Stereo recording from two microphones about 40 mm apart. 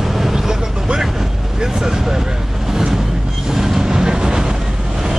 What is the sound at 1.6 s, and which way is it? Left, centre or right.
Speech, centre.